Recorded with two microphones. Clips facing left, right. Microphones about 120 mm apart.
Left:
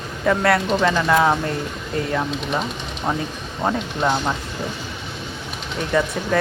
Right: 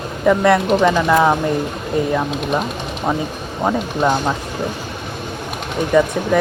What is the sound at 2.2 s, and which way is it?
Speech, 55° right (ahead or behind).